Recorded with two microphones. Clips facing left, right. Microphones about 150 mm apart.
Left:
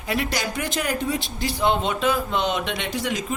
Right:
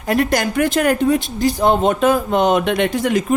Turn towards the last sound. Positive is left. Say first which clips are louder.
# right 9 dB
turn(degrees=-55)  # may be behind; listen again after turning